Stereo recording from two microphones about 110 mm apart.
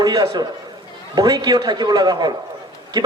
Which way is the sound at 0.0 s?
35° right (ahead or behind).